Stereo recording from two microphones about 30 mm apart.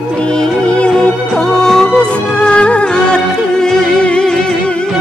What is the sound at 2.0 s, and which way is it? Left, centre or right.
Music, left.